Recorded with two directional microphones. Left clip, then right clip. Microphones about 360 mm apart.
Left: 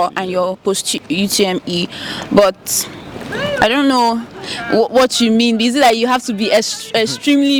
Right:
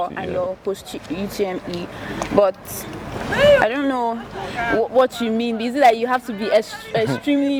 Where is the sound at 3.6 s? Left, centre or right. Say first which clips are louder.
Left 6 dB; left.